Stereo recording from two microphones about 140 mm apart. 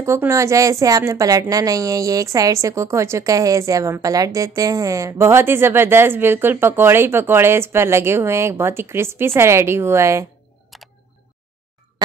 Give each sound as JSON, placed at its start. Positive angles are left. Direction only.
{"t": 0.0, "sound": "a woman's voice", "side_deg": -20}
{"t": 10.7, "sound": "camera", "side_deg": 0}